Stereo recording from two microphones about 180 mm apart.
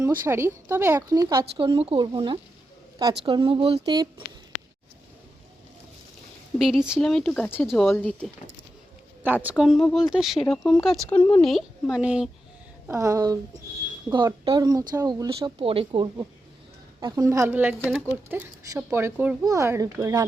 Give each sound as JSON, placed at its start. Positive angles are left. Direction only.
{"t": 0.0, "sound": "speech", "side_deg": -15}
{"t": 6.6, "sound": "speech", "side_deg": -5}
{"t": 9.2, "sound": "speech", "side_deg": -10}
{"t": 12.9, "sound": "speech", "side_deg": -15}